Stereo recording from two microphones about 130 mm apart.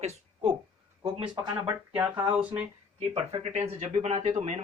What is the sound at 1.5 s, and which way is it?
Speech, 10° right (ahead or behind).